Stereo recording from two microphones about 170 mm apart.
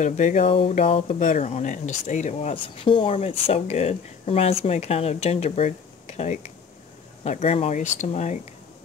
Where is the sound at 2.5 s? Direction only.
30° left (ahead or behind).